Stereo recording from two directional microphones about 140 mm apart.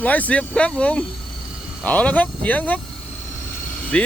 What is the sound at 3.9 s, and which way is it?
Speech, 10° left (ahead or behind).